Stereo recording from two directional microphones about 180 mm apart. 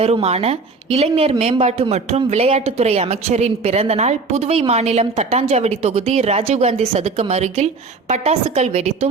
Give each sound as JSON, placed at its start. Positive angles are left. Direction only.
{"t": 0.0, "sound": "a woman's voice", "side_deg": -35}